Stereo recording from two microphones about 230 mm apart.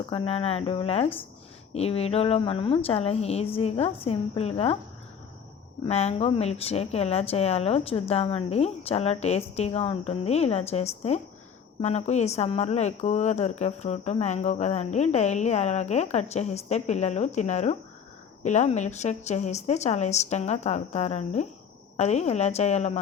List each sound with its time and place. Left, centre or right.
0.1 s speech: left
5.8 s speech: left